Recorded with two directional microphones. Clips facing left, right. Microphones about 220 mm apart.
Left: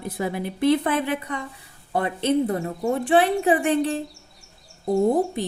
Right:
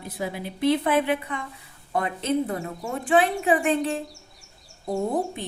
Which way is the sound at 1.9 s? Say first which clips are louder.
Left 3 dB; 30° left (ahead or behind).